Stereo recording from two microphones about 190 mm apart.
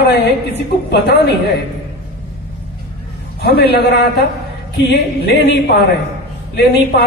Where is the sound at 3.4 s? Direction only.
55° left (ahead or behind).